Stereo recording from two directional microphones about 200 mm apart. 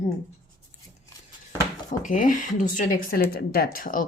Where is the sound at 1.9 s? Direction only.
40° left (ahead or behind).